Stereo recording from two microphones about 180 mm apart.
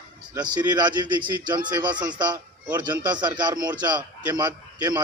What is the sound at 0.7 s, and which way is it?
A man's voice, 25° right (ahead or behind).